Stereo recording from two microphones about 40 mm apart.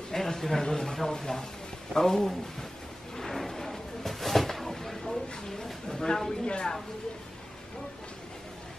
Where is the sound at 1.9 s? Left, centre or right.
Centre.